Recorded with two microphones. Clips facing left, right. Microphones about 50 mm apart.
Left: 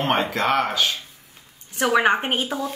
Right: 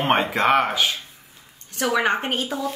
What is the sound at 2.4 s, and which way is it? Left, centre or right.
Speech, centre.